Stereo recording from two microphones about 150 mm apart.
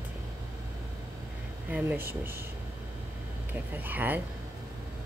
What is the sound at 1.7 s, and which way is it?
Speech, 15° right (ahead or behind).